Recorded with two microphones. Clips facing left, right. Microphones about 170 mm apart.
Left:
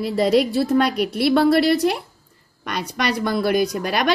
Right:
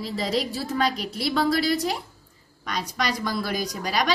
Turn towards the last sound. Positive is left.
turn(degrees=60)  # may be behind; listen again after turning